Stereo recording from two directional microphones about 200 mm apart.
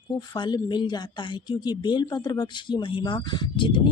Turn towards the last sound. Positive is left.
turn(degrees=25)  # may be behind; listen again after turning